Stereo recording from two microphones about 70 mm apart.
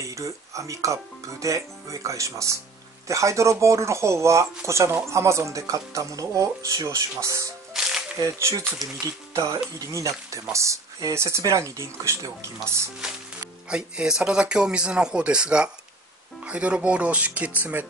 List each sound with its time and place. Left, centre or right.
0.0 s speech: right
7.7 s music: centre
8.2 s speech: right
13.7 s speech: centre